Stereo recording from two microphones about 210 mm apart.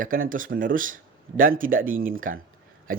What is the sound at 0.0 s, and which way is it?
Speech, 40° right (ahead or behind).